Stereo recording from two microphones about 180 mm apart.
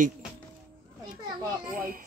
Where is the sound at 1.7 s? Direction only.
50° right (ahead or behind).